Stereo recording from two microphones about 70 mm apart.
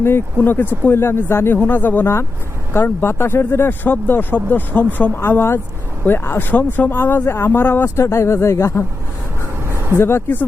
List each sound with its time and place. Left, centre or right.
0.4 s speech: left
1.5 s speech: left
7.9 s speech: left
9.6 s a sound: right
10.0 s speech: left